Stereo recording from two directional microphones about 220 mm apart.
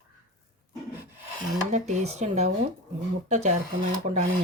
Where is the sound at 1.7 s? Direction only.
35° right (ahead or behind).